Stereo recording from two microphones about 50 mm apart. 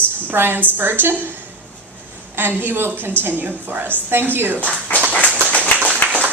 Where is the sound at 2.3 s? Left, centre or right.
Right.